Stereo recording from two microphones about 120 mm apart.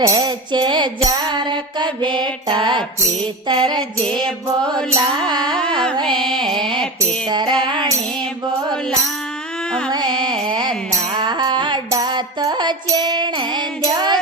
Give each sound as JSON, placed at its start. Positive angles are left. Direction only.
{"t": 0.0, "sound": "music", "side_deg": -30}
{"t": 3.4, "sound": "mantra", "side_deg": -40}
{"t": 6.0, "sound": "music", "side_deg": -40}
{"t": 7.3, "sound": "mantra", "side_deg": -40}
{"t": 7.6, "sound": "music", "side_deg": -40}
{"t": 9.9, "sound": "music", "side_deg": -35}